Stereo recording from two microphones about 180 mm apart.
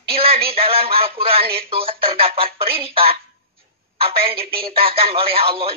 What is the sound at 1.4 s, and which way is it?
Speech, 60° right (ahead or behind).